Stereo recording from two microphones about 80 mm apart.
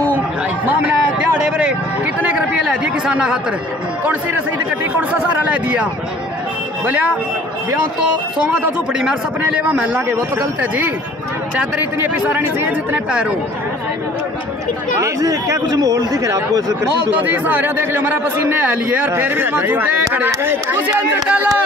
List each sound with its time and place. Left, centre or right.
2.2 s chatter: centre
5.5 s speech: centre
6.9 s speech: centre
9.4 s speech: centre
12.0 s speech: right
15.0 s speech: right
17.1 s speech: right